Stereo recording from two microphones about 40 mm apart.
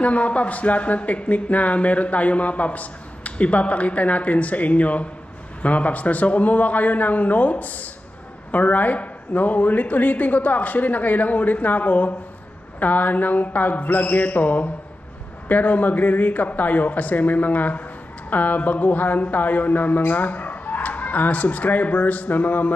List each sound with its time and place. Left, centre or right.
0.0 s speech: left